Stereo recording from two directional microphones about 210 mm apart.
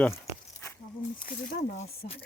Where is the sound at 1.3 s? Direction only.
35° left (ahead or behind).